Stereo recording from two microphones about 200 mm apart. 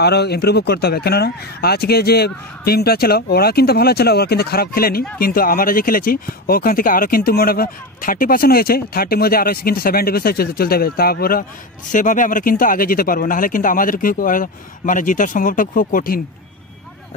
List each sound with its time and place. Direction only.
0.0 s speech: 55° left (ahead or behind)